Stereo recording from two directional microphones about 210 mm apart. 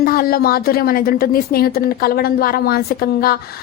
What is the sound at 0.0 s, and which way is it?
A woman's voice, 45° left (ahead or behind).